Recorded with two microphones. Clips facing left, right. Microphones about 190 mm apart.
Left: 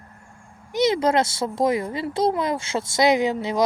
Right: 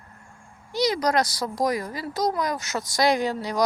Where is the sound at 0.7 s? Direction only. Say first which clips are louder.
Left 3 dB; 25° left (ahead or behind).